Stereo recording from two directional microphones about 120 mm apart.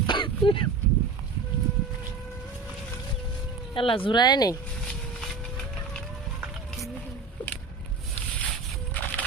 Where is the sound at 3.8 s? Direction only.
45° left (ahead or behind).